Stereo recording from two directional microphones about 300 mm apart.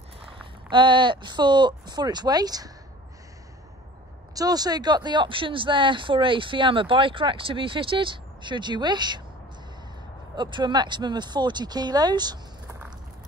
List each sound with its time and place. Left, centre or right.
0.7 s speech: centre
4.4 s speech: centre
10.3 s speech: centre